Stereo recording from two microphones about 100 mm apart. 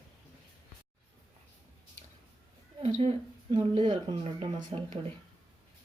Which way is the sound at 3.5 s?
55° right (ahead or behind).